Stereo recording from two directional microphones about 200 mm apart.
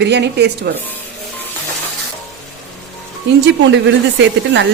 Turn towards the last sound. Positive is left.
turn(degrees=-65)  # may be behind; listen again after turning